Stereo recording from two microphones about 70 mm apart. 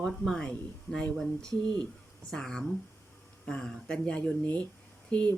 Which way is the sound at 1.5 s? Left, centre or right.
Right.